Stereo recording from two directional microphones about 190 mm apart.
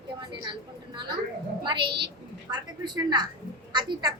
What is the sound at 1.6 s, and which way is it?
A woman's voice, 25° right (ahead or behind).